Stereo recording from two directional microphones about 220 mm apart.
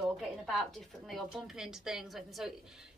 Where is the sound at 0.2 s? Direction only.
Centre (ahead or behind).